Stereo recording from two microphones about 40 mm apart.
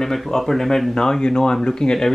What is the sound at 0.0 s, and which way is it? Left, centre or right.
Speech, centre.